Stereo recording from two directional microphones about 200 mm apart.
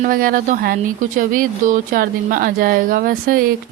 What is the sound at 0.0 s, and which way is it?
Speech, 45° right (ahead or behind).